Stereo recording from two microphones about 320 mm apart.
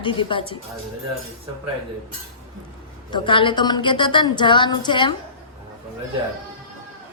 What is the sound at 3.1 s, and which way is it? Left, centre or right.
A woman's voice, centre.